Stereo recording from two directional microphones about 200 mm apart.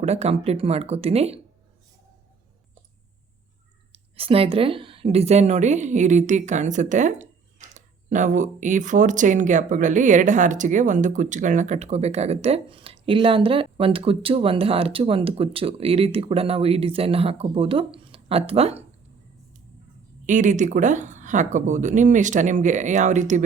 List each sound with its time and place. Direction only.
0.0 s a woman's voice: 35° right (ahead or behind)
3.9 s a woman's voice: 30° right (ahead or behind)
20.2 s a woman's voice: 40° right (ahead or behind)